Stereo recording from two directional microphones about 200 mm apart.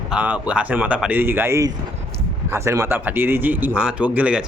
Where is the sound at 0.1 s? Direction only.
5° right (ahead or behind).